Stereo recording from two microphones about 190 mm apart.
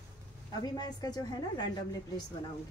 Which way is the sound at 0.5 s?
20° left (ahead or behind).